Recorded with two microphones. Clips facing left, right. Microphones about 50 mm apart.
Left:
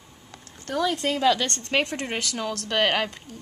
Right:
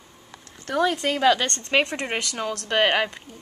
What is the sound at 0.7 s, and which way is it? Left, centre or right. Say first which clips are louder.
Speech: right 3 dB; right.